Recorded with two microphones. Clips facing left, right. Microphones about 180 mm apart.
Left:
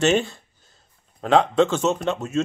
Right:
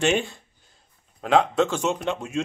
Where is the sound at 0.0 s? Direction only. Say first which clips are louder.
Left 3 dB; 15° right (ahead or behind).